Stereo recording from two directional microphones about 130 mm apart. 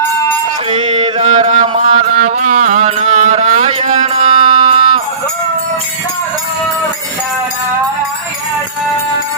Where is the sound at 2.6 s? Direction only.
75° right (ahead or behind).